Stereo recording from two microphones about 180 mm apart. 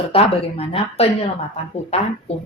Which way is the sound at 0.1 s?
30° left (ahead or behind).